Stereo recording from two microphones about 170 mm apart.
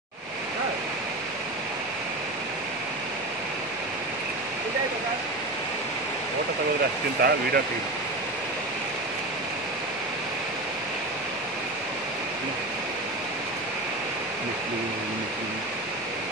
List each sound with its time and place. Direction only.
7.2 s speech: 70° right (ahead or behind)